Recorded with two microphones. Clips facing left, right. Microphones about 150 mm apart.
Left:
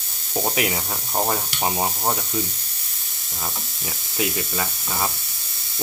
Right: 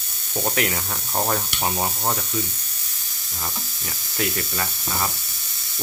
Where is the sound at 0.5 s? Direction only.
15° left (ahead or behind).